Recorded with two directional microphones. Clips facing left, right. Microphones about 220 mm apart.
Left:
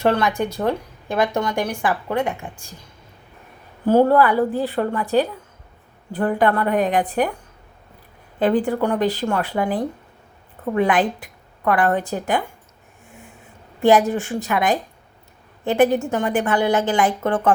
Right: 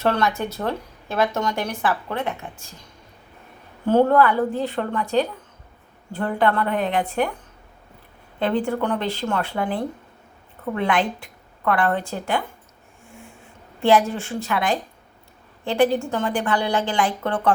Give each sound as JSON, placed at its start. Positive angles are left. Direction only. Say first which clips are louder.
{"t": 0.0, "sound": "speech", "louder": "left 3 dB", "side_deg": 15}
{"t": 3.8, "sound": "speech", "louder": "left 2 dB", "side_deg": 10}
{"t": 6.1, "sound": "speech", "louder": "left 2 dB", "side_deg": 10}
{"t": 8.8, "sound": "speech", "louder": "left 4 dB", "side_deg": 10}
{"t": 13.8, "sound": "a woman's voice", "louder": "left 3 dB", "side_deg": 15}